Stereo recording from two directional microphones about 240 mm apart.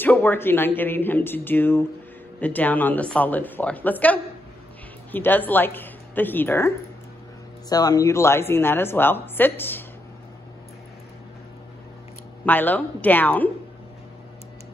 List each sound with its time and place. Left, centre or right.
0.0 s a woman's voice: centre
7.7 s a woman's voice: centre
12.4 s a woman's voice: centre